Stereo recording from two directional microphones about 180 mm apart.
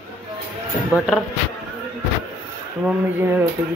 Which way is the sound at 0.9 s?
Centre (ahead or behind).